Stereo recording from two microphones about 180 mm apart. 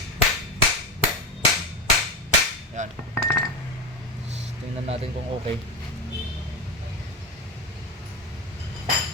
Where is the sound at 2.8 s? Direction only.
40° right (ahead or behind).